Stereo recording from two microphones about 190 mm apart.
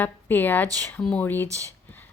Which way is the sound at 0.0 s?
10° left (ahead or behind).